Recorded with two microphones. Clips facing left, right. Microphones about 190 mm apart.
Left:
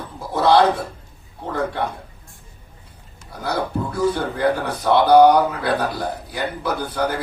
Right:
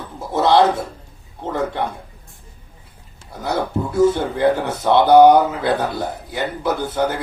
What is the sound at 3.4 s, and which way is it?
A man's voice, 25° right (ahead or behind).